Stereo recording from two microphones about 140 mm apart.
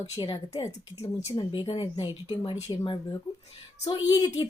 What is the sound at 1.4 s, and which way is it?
A woman's voice, 35° left (ahead or behind).